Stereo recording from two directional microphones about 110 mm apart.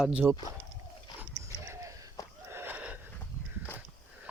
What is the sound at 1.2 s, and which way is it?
Dog, 25° right (ahead or behind).